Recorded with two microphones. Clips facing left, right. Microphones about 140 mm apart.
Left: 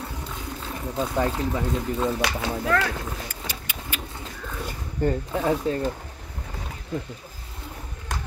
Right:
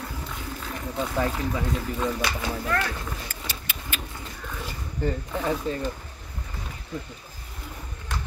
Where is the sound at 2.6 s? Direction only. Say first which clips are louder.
Left 4 dB; 90° left.